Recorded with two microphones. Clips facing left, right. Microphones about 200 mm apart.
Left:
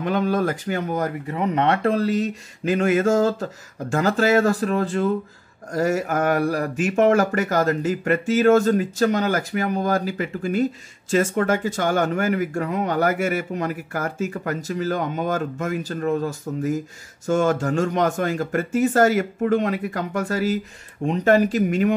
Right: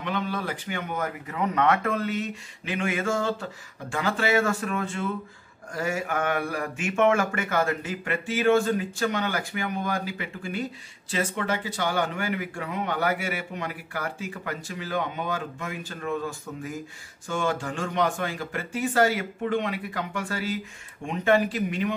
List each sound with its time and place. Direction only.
0.0 s speech: 45° left (ahead or behind)